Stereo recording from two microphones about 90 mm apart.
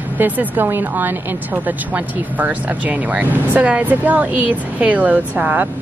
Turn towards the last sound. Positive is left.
turn(degrees=-20)  # may be behind; listen again after turning